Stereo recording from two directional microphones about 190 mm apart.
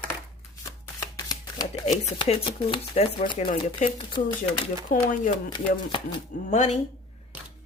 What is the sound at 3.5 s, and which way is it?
Speech, 45° left (ahead or behind).